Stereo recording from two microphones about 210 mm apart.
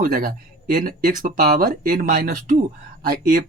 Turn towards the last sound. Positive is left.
turn(degrees=-45)  # may be behind; listen again after turning